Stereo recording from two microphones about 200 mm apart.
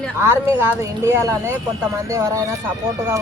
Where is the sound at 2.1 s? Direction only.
15° right (ahead or behind).